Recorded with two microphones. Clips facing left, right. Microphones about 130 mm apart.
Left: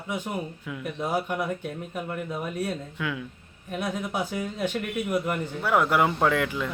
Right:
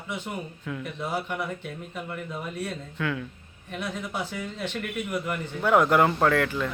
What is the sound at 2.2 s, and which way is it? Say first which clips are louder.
Speech: left 3 dB; 10° left (ahead or behind).